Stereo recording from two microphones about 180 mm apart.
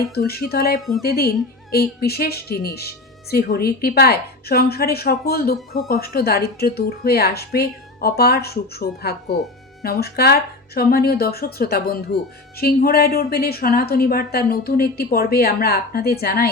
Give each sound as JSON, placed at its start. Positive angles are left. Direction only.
{"t": 0.0, "sound": "a woman's voice", "side_deg": 60}
{"t": 0.8, "sound": "speech", "side_deg": 0}
{"t": 1.0, "sound": "a woman's voice", "side_deg": 60}